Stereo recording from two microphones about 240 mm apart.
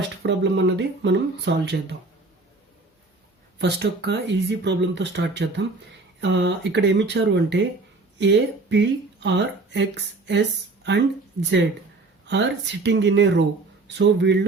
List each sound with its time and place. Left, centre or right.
0.2 s speech: right
3.6 s speech: right